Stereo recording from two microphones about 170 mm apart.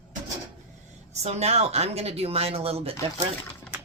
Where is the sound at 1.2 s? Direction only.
40° right (ahead or behind).